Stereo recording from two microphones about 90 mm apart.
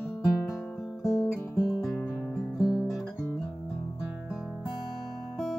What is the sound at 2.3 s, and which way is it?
Guitar, centre (ahead or behind).